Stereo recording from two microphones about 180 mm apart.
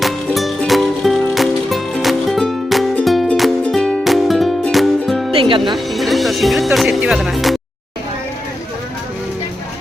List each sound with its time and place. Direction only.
0.0 s music: centre (ahead or behind)
5.3 s music: 30° right (ahead or behind)
5.7 s music: centre (ahead or behind)